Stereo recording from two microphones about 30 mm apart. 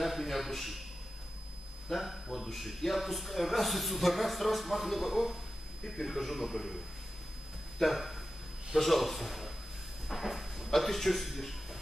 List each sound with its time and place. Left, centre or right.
0.0 s a man's voice: centre
1.9 s a man's voice: centre
7.8 s a man's voice: centre